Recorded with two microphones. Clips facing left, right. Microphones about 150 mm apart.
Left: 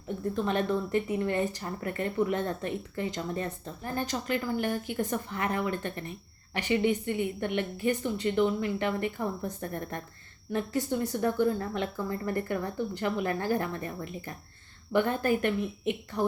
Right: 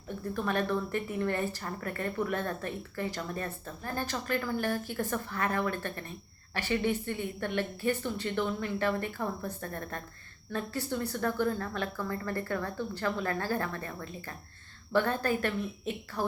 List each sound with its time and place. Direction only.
0.3 s a woman's voice: 20° left (ahead or behind)